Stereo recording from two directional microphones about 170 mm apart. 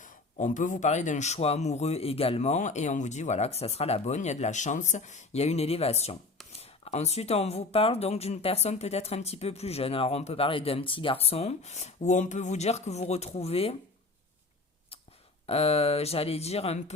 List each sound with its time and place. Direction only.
0.0 s speech: 50° left (ahead or behind)
15.4 s speech: 35° left (ahead or behind)